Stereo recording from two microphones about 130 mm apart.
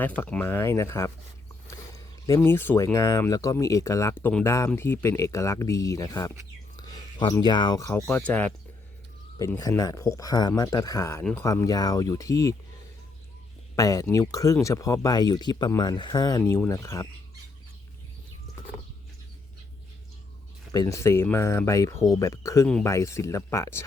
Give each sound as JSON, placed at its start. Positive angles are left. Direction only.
{"t": 0.0, "sound": "speech", "side_deg": 15}
{"t": 2.2, "sound": "speech", "side_deg": 20}
{"t": 4.4, "sound": "speech", "side_deg": 20}
{"t": 9.4, "sound": "speech", "side_deg": 25}
{"t": 11.2, "sound": "speech", "side_deg": 15}
{"t": 11.4, "sound": "speech", "side_deg": 25}
{"t": 13.7, "sound": "speech", "side_deg": 25}
{"t": 16.4, "sound": "speech", "side_deg": 20}
{"t": 20.7, "sound": "speech", "side_deg": 25}